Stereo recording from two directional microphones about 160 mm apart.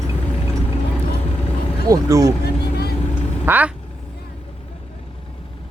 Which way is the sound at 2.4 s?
80° left.